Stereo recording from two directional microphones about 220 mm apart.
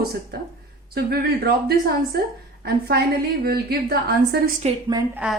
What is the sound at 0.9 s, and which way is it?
A woman's voice, 45° right (ahead or behind).